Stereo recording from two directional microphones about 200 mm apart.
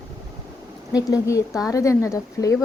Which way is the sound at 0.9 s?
15° left (ahead or behind).